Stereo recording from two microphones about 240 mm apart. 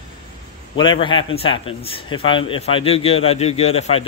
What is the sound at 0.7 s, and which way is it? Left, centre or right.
A man's voice, centre.